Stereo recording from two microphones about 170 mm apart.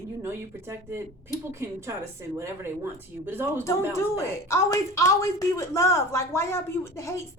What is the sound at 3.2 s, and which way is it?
Speech, 10° right (ahead or behind).